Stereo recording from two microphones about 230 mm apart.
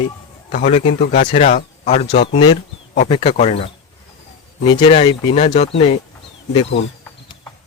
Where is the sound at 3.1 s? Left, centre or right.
Left.